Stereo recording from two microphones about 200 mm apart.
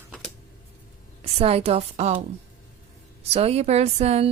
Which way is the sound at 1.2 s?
30° right (ahead or behind).